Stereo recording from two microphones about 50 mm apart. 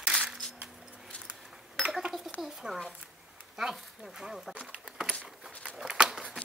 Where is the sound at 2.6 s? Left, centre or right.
Centre.